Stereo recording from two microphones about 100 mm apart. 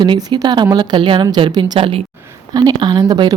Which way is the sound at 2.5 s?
40° right (ahead or behind).